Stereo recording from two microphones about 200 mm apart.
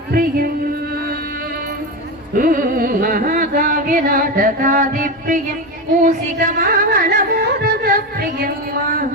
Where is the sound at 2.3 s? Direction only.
45° right (ahead or behind).